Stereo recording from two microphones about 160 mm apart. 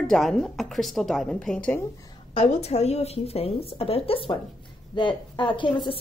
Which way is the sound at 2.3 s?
40° left (ahead or behind).